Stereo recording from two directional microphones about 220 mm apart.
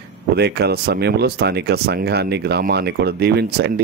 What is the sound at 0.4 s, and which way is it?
Speech, 45° right (ahead or behind).